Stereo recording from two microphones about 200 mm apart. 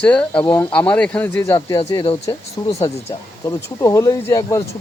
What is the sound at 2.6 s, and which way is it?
Speech, 30° left (ahead or behind).